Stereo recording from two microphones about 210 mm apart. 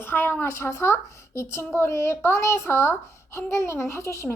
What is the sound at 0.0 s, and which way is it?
A woman's voice, 10° left (ahead or behind).